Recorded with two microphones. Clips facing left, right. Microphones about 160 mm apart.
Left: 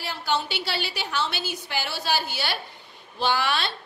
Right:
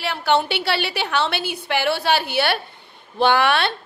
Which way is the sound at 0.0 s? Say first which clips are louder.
Right 8 dB; 65° right (ahead or behind).